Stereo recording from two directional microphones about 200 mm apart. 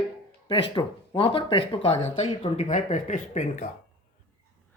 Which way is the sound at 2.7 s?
40° left (ahead or behind).